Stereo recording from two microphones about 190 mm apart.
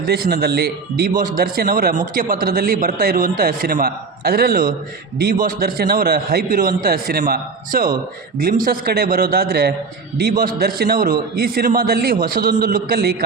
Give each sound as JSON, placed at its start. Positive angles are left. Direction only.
{"t": 0.0, "sound": "a man's voice", "side_deg": -55}